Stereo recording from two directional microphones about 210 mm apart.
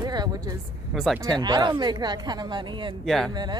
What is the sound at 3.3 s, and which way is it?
Speech, 20° right (ahead or behind).